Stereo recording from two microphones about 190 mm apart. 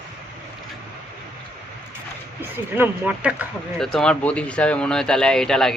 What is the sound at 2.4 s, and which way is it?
Speech, 10° right (ahead or behind).